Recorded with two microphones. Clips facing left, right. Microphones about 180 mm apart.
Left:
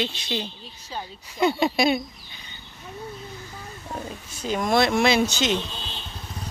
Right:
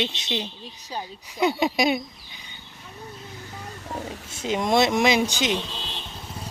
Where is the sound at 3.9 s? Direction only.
25° right (ahead or behind).